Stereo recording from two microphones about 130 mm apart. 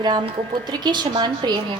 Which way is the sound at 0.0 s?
35° right (ahead or behind).